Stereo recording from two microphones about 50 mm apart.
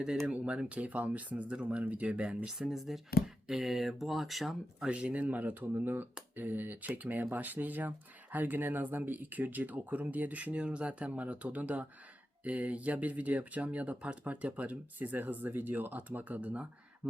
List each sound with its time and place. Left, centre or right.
0.3 s speech: right
2.6 s speech: centre
4.9 s speech: right